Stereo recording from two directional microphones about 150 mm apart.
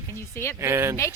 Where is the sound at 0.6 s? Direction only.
15° right (ahead or behind).